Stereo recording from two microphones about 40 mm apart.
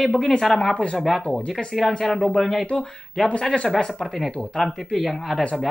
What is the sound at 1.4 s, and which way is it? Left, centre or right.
Speech, centre.